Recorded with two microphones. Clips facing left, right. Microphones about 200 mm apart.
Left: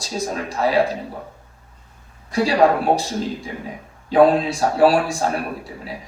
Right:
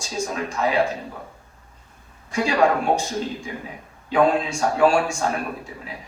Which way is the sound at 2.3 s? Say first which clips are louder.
Left 3 dB; 35° left (ahead or behind).